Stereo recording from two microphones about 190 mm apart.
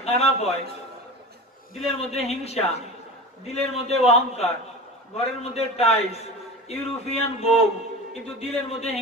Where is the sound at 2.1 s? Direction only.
35° left (ahead or behind).